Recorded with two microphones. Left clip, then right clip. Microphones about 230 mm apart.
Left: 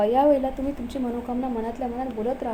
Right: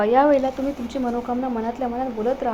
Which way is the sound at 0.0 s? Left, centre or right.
Centre.